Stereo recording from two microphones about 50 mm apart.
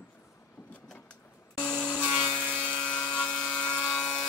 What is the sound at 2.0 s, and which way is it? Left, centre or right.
Sawing, right.